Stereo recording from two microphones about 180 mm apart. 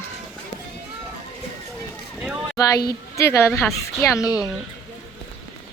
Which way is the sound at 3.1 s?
15° left (ahead or behind).